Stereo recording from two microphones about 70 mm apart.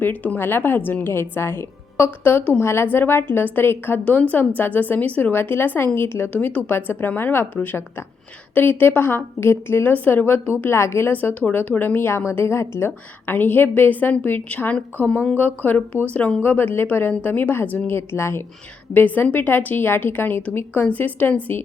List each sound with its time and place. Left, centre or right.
0.0 s a woman's voice: left
11.1 s a woman's voice: left
18.9 s a woman's voice: left